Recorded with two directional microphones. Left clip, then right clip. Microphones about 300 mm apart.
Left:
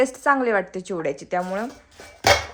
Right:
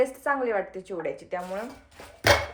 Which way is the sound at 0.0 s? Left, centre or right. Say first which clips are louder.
Left 6 dB; left.